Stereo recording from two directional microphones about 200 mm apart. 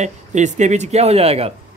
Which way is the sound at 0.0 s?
35° right (ahead or behind).